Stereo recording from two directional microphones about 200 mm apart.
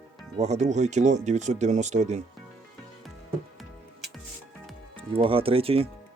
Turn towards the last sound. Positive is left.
turn(degrees=-30)  # may be behind; listen again after turning